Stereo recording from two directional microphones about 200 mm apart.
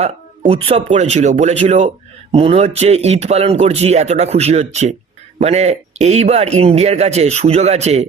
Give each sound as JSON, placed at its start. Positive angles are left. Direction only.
{"t": 0.0, "sound": "a man's voice", "side_deg": -30}